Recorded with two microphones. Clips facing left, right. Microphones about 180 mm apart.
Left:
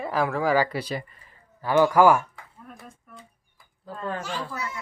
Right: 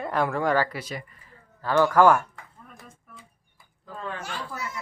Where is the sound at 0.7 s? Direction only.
30° left (ahead or behind).